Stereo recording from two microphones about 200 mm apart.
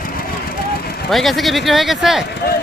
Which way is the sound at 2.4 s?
50° left (ahead or behind).